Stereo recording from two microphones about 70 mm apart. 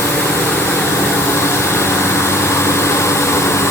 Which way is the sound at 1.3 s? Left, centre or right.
Left.